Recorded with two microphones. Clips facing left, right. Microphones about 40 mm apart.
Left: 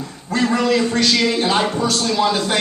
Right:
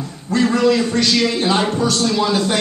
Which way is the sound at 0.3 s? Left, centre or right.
Centre.